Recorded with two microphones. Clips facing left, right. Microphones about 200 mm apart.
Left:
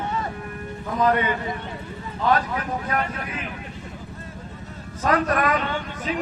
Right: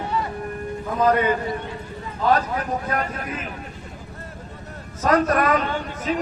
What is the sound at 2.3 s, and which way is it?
A man's voice, 40° right (ahead or behind).